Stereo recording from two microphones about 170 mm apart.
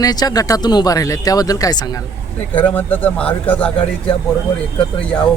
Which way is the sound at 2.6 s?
10° left (ahead or behind).